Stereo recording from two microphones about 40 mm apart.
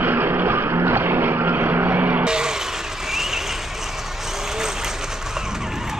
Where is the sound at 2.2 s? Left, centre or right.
Centre.